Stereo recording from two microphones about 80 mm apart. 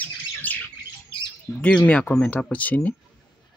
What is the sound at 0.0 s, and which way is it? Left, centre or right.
Squawk, left.